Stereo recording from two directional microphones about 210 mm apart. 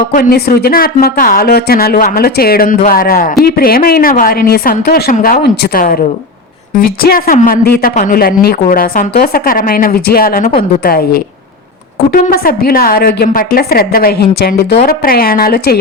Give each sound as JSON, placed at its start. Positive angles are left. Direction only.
{"t": 0.1, "sound": "a woman's voice", "side_deg": 45}